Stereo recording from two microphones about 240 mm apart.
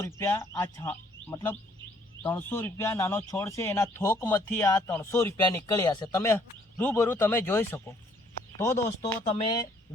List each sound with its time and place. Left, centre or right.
0.0 s a woman's voice: centre